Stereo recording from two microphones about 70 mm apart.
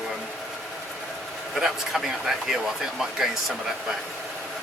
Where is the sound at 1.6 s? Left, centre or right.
Centre.